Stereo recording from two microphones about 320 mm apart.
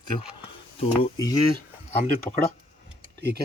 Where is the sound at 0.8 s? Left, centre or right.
Centre.